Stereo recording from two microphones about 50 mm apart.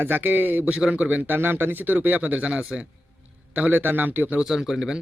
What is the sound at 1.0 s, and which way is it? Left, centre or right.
Speech, right.